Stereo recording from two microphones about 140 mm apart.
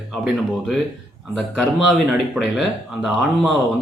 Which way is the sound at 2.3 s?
Centre (ahead or behind).